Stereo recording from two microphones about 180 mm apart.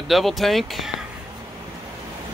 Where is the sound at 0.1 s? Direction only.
Centre (ahead or behind).